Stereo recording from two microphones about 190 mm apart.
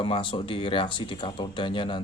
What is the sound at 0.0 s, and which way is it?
Speech, 25° left (ahead or behind).